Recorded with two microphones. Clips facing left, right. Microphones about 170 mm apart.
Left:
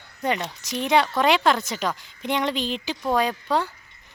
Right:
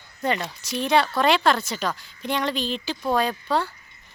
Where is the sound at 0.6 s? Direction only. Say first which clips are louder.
Even; 20° left (ahead or behind).